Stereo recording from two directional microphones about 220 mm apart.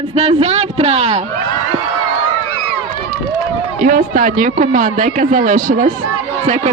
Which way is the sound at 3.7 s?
40° right (ahead or behind).